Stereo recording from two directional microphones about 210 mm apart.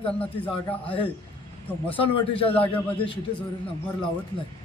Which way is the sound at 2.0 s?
25° left (ahead or behind).